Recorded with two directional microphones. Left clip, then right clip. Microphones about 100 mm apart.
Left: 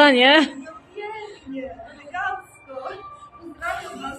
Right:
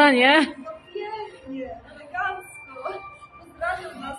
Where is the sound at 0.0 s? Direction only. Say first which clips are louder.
Left 2 dB; 10° left (ahead or behind).